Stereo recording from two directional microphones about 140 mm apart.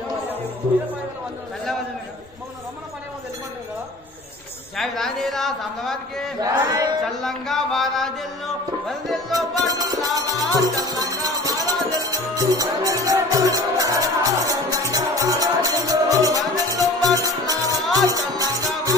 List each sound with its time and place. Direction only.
4.7 s a man's voice: centre (ahead or behind)
6.4 s a sound: 25° right (ahead or behind)
7.2 s a man's voice: centre (ahead or behind)
8.8 s music: centre (ahead or behind)
9.6 s a sound: 25° right (ahead or behind)
10.0 s music: 25° right (ahead or behind)